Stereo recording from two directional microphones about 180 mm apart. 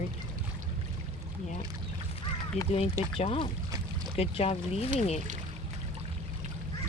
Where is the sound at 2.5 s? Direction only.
35° left (ahead or behind).